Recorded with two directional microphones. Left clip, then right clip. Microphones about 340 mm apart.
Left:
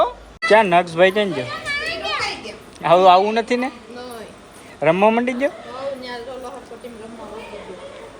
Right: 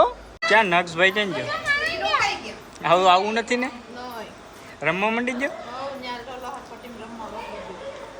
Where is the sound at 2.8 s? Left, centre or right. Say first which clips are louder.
Left 5 dB; centre.